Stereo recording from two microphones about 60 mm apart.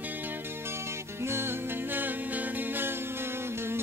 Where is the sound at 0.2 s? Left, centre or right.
Right.